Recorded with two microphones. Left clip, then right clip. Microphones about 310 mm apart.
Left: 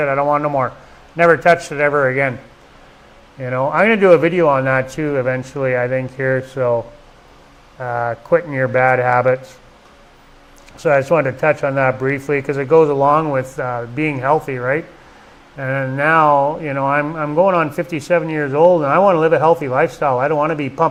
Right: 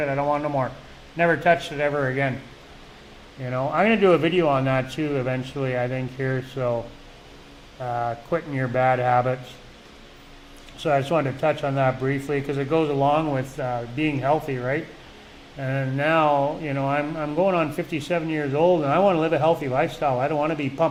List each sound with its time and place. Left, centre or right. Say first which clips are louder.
0.0 s speech: left 8 dB; left
3.4 s speech: left 7 dB; left
7.8 s speech: left 6 dB; left
10.8 s speech: left 8 dB; left